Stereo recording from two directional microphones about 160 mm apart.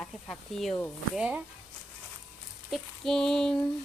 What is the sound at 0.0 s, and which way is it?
Child singing, 5° left (ahead or behind).